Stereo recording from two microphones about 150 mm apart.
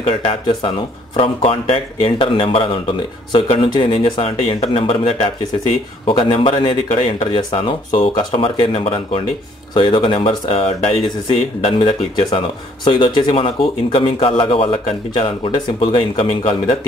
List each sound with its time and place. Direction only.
0.0 s a man's voice: 35° left (ahead or behind)